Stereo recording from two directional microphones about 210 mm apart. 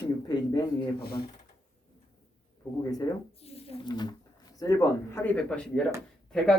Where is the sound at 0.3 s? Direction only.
20° left (ahead or behind).